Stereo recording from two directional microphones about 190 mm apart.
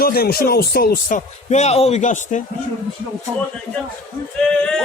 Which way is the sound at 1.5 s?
35° left (ahead or behind).